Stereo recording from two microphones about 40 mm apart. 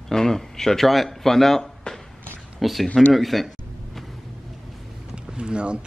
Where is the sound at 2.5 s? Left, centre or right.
Centre.